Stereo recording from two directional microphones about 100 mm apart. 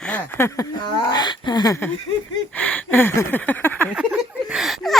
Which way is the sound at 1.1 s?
45° left (ahead or behind).